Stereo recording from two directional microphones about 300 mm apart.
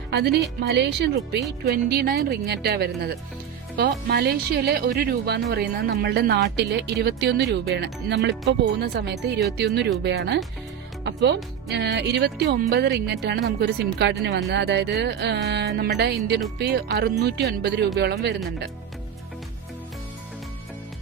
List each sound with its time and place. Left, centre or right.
0.1 s speech: right
11.0 s music: right
11.7 s speech: right